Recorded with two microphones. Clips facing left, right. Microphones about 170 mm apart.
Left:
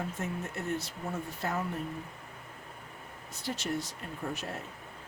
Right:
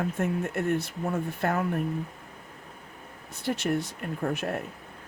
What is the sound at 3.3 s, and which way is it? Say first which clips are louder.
Speech: right 7 dB; 55° right (ahead or behind).